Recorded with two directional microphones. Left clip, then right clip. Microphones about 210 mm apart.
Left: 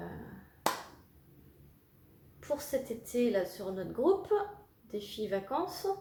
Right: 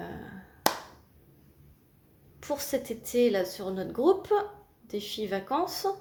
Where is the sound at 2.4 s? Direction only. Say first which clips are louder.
Right 3 dB; 45° right (ahead or behind).